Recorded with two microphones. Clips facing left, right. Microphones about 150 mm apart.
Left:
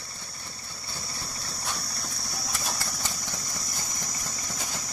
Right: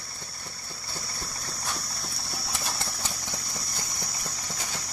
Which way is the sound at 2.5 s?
20° right (ahead or behind).